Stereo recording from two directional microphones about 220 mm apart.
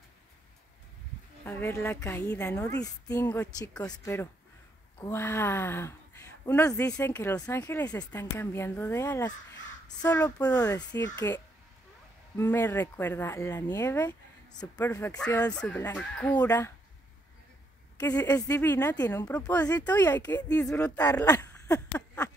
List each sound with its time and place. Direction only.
1.4 s speech: 10° left (ahead or behind)
18.0 s speech: 10° left (ahead or behind)